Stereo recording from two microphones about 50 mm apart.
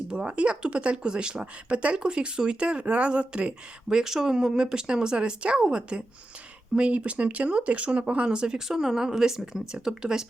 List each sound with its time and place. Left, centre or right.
0.1 s speech: right
3.8 s speech: centre